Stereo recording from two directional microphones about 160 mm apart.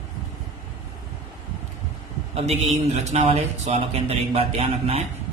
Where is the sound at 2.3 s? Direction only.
40° right (ahead or behind).